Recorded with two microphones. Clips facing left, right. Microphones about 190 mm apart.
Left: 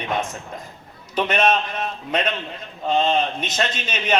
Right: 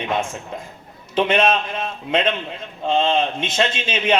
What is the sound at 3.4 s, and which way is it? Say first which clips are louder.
Speech: right 3 dB; 25° right (ahead or behind).